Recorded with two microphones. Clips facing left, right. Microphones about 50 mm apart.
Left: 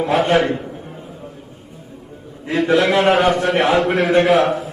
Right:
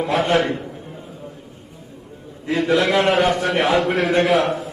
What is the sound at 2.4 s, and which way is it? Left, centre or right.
A man's voice, centre.